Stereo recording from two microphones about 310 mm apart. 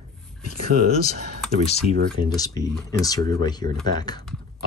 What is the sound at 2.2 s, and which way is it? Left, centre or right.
Speech, centre.